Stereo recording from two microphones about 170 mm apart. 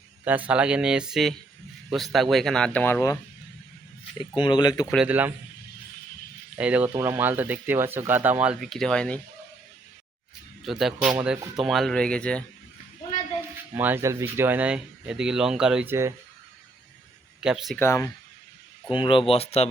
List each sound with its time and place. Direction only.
0.3 s speech: 10° right (ahead or behind); by 3.2 s 15° left (ahead or behind)
4.2 s speech: 25° left (ahead or behind)
4.9 s speech: 10° right (ahead or behind)
6.6 s speech: 10° right (ahead or behind)
10.6 s speech: centre (ahead or behind)
13.7 s speech: 10° right (ahead or behind)
17.4 s speech: 5° right (ahead or behind)
17.7 s speech: 15° left (ahead or behind)
18.9 s speech: 30° left (ahead or behind)